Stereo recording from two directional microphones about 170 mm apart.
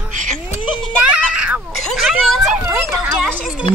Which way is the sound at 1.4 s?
5° right (ahead or behind).